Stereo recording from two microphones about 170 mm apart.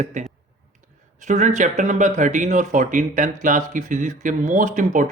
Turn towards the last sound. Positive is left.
turn(degrees=-50)  # may be behind; listen again after turning